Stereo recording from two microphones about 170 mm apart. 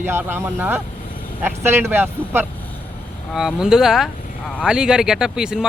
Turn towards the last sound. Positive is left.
turn(degrees=-5)  # may be behind; listen again after turning